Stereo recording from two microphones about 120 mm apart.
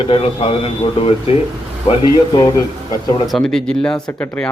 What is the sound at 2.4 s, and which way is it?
Speech, 25° left (ahead or behind).